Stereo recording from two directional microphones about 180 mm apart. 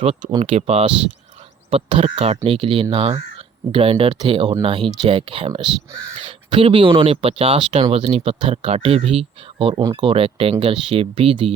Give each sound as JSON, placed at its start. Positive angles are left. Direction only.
{"t": 0.3, "sound": "speech", "side_deg": -30}